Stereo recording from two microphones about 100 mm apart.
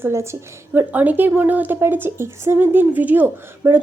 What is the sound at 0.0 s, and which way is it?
A woman's voice, 25° right (ahead or behind).